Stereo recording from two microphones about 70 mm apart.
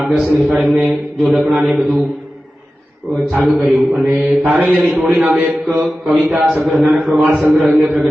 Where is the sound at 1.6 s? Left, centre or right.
Centre.